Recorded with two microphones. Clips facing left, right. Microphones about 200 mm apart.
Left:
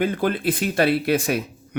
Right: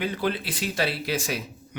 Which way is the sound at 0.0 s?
50° left (ahead or behind).